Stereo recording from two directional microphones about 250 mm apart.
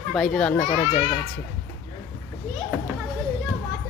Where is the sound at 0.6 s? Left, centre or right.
Centre.